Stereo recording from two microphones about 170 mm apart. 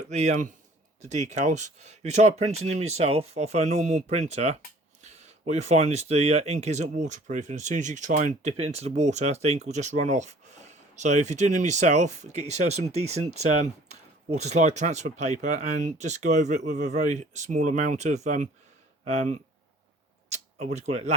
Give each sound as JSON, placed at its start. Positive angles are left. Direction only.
{"t": 0.0, "sound": "speech", "side_deg": -45}